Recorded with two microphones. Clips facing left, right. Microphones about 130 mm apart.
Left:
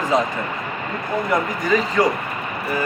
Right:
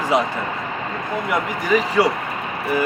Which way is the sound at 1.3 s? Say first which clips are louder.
Even; 10° right (ahead or behind).